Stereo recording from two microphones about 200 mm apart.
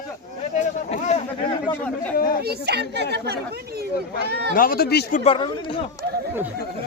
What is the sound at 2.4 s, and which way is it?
Speech, 55° right (ahead or behind).